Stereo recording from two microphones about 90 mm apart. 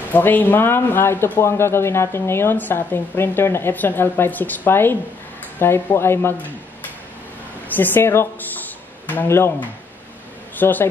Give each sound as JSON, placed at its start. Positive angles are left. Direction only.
{"t": 0.1, "sound": "a man's voice", "side_deg": 20}
{"t": 7.6, "sound": "a man's voice", "side_deg": 20}